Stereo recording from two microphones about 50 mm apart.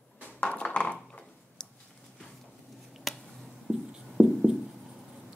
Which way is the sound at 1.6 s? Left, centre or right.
Centre.